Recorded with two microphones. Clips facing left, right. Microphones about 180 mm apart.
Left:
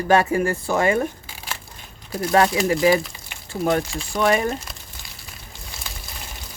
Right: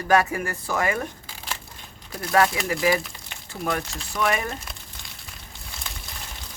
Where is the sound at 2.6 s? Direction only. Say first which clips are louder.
Left 5 dB; 25° left (ahead or behind).